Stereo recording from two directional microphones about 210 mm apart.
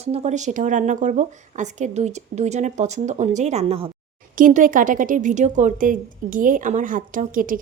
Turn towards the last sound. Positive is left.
turn(degrees=-40)  # may be behind; listen again after turning